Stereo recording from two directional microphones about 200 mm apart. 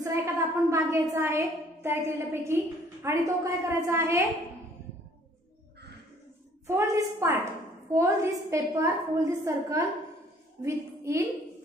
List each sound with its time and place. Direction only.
0.0 s a woman's voice: 15° right (ahead or behind)
6.7 s a woman's voice: 10° right (ahead or behind)